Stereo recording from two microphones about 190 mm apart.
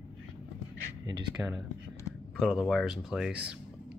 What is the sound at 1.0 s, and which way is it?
Speech, 20° right (ahead or behind).